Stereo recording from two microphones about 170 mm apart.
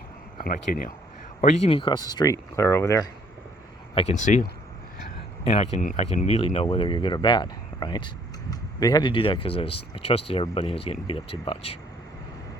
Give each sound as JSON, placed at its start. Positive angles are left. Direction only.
{"t": 0.3, "sound": "speech", "side_deg": 60}
{"t": 1.4, "sound": "speech", "side_deg": 40}
{"t": 3.9, "sound": "speech", "side_deg": 40}
{"t": 5.5, "sound": "speech", "side_deg": 40}